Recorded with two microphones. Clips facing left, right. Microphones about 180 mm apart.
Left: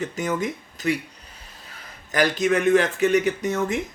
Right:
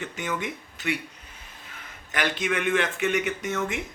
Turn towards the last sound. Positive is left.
turn(degrees=35)  # may be behind; listen again after turning